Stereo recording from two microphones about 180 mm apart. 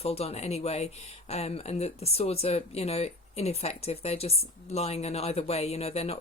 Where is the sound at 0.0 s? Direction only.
35° left (ahead or behind).